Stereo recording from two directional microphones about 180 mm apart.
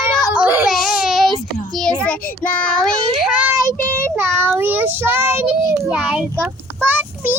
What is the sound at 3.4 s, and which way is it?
Child singing, 10° right (ahead or behind).